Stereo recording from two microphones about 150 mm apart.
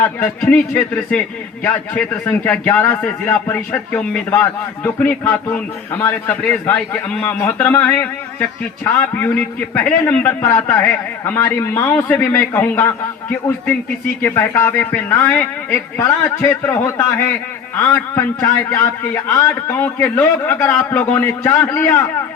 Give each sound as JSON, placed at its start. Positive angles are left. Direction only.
{"t": 0.0, "sound": "a man's voice", "side_deg": 10}
{"t": 14.2, "sound": "a man's voice", "side_deg": 15}